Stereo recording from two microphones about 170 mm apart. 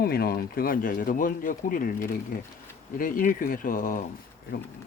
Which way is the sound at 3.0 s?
55° left (ahead or behind).